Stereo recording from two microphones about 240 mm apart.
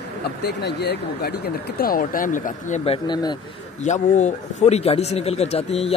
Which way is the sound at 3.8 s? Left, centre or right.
Left.